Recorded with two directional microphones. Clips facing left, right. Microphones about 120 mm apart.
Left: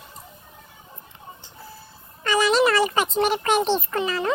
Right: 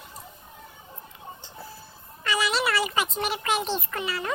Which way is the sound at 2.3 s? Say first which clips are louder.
Left 7 dB; 40° left (ahead or behind).